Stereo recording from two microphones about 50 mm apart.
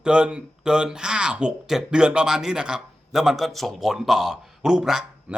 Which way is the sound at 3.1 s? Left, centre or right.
Centre.